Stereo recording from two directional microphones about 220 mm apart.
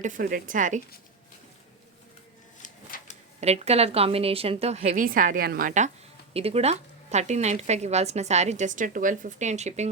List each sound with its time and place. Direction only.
0.0 s speech: 35° right (ahead or behind)
2.6 s a sound: 35° left (ahead or behind)
3.4 s a woman's voice: 30° right (ahead or behind)